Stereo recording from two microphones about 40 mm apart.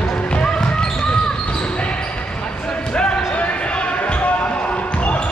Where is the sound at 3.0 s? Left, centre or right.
Left.